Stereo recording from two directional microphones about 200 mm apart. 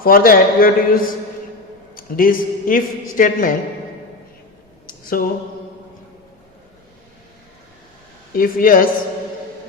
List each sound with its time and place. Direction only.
0.0 s a man's voice: 45° left (ahead or behind)
4.9 s a sound: 45° left (ahead or behind)
8.3 s a man's voice: 45° left (ahead or behind)